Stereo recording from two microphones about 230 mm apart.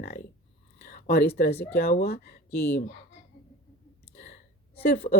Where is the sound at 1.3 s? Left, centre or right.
Left.